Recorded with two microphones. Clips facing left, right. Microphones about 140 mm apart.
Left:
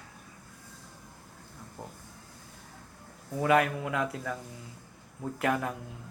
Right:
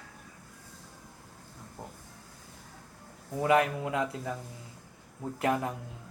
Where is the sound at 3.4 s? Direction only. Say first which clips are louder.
Even; 25° right (ahead or behind).